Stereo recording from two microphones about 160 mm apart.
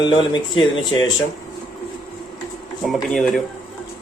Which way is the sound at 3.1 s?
5° left (ahead or behind).